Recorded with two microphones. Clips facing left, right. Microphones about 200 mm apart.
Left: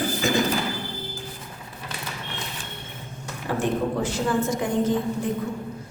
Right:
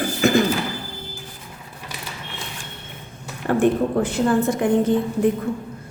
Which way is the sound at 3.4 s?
55° right (ahead or behind).